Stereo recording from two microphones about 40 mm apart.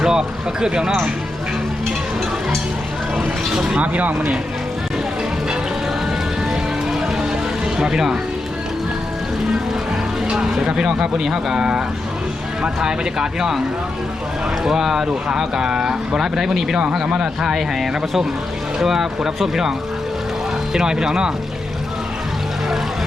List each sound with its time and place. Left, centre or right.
0.0 s speech: centre
3.5 s speech: centre
3.8 s speech: right
7.8 s speech: centre
10.3 s speech: centre
14.6 s speech: centre
17.1 s speech: right
18.8 s speech: centre
20.7 s speech: centre